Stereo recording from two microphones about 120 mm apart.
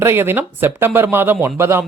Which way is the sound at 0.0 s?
20° right (ahead or behind).